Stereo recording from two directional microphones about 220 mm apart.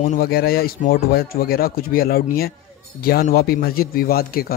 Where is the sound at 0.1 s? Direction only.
45° left (ahead or behind).